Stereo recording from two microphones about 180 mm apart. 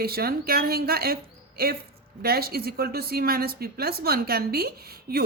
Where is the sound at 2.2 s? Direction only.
60° right (ahead or behind).